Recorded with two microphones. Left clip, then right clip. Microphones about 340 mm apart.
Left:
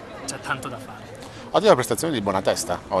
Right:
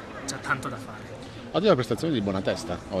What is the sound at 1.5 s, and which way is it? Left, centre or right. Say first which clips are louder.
Speech: left 5 dB; centre.